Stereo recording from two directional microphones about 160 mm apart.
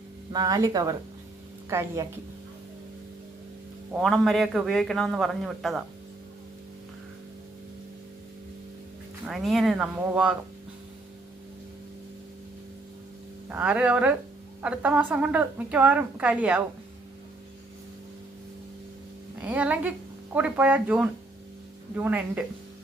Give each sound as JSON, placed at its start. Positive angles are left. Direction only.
{"t": 0.3, "sound": "a woman's voice", "side_deg": -20}
{"t": 4.0, "sound": "a man's voice", "side_deg": 0}
{"t": 9.2, "sound": "a man's voice", "side_deg": 0}
{"t": 13.5, "sound": "a woman's voice", "side_deg": -10}
{"t": 19.4, "sound": "a woman's voice", "side_deg": -10}